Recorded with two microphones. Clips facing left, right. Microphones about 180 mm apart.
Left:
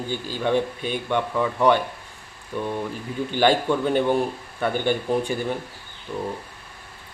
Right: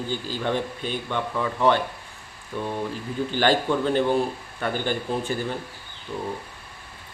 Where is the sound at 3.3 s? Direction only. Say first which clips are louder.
Left 3 dB; 15° left (ahead or behind).